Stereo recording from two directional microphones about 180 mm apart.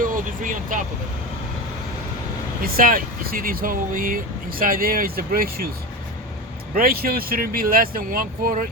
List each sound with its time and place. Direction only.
0.0 s speech: 50° right (ahead or behind)
2.6 s speech: 55° right (ahead or behind)
6.7 s speech: 55° right (ahead or behind)